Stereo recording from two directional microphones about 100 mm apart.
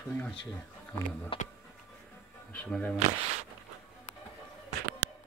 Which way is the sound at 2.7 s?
10° left (ahead or behind).